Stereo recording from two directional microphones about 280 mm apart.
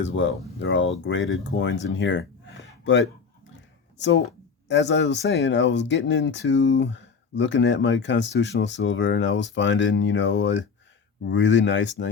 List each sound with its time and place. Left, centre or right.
0.0 s speech: left